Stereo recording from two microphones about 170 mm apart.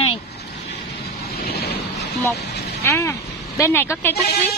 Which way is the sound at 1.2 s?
65° left (ahead or behind).